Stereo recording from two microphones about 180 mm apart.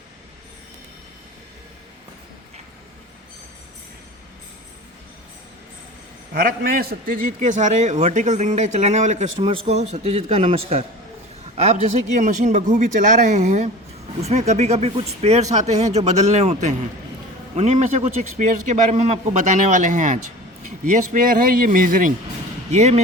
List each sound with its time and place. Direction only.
6.3 s a man's voice: 55° right (ahead or behind); by 9.3 s 40° right (ahead or behind)
9.4 s a man's voice: 30° right (ahead or behind); by 22.1 s 50° right (ahead or behind)
22.7 s a man's voice: 40° right (ahead or behind)